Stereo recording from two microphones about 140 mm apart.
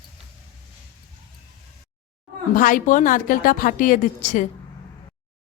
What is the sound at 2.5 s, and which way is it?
A woman's voice, 75° left (ahead or behind).